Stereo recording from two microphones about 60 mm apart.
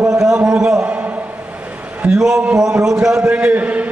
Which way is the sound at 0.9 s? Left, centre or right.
Right.